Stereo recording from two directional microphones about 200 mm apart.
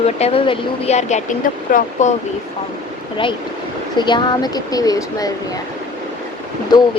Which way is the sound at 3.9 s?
20° left (ahead or behind).